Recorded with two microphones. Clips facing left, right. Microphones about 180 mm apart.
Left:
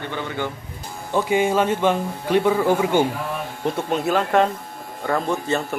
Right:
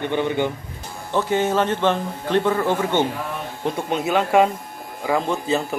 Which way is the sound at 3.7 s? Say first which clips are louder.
Even; centre (ahead or behind).